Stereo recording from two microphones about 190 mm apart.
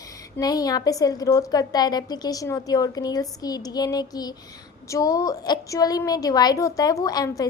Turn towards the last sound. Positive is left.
turn(degrees=20)  # may be behind; listen again after turning